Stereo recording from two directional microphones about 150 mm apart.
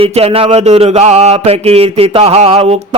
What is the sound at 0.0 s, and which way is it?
Mantra, 40° right (ahead or behind).